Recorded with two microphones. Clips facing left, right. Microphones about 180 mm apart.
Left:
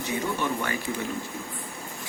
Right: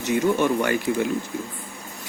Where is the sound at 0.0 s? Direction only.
80° right.